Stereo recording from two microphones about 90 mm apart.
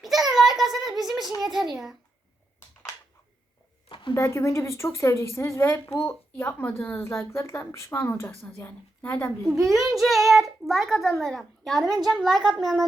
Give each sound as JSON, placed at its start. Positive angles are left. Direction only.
{"t": 0.0, "sound": "a sound", "side_deg": -5}
{"t": 0.3, "sound": "child singing", "side_deg": -5}
{"t": 0.9, "sound": "a child's voice", "side_deg": -5}
{"t": 3.8, "sound": "a sound", "side_deg": 65}
{"t": 4.1, "sound": "speech", "side_deg": 30}
{"t": 8.6, "sound": "a woman's voice", "side_deg": 15}
{"t": 9.6, "sound": "a child's voice", "side_deg": 0}